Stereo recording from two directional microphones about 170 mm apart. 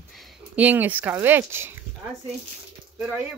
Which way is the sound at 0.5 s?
10° right (ahead or behind).